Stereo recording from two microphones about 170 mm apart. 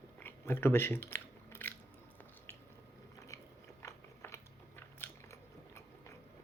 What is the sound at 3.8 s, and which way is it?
Biting, 15° left (ahead or behind).